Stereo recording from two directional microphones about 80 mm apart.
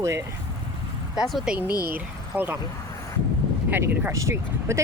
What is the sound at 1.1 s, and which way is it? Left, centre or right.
Speech, centre.